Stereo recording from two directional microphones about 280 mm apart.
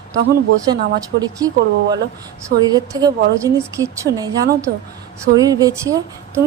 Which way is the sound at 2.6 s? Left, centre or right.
Centre.